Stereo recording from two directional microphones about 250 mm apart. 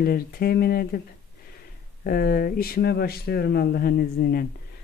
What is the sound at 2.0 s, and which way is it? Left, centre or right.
Speech, left.